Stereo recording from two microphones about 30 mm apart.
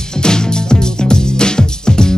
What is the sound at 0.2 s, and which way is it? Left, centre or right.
Music, left.